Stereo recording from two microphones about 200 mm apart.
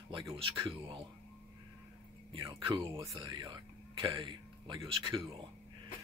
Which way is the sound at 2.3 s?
25° right (ahead or behind).